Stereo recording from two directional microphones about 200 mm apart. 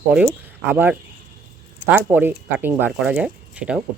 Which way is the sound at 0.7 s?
10° right (ahead or behind).